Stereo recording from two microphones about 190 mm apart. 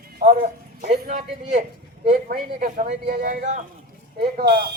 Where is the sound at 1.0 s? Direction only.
40° right (ahead or behind).